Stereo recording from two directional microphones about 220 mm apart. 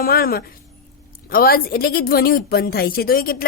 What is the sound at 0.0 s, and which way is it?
A woman's voice, 40° left (ahead or behind).